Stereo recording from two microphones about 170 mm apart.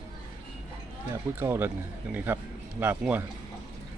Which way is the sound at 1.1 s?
15° right (ahead or behind).